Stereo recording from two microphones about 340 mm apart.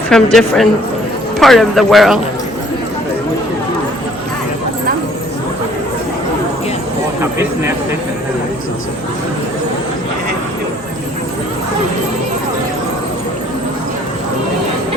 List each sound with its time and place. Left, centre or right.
0.1 s a man's voice: centre
7.2 s speech: centre